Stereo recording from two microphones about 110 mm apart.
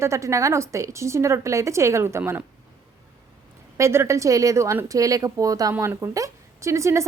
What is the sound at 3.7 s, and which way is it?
Speech, 25° right (ahead or behind).